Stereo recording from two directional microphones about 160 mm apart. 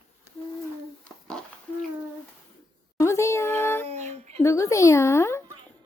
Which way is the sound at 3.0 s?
20° left (ahead or behind).